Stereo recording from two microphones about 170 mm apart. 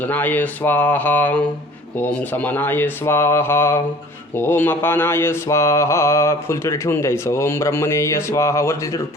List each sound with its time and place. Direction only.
0.0 s mantra: 10° left (ahead or behind)